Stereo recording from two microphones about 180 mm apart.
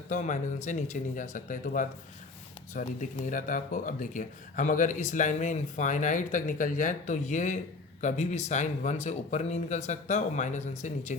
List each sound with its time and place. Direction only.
0.1 s speech: 45° left (ahead or behind)